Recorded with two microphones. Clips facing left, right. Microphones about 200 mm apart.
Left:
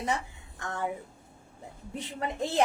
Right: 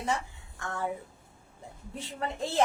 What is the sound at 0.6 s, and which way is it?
Speech, 20° left (ahead or behind).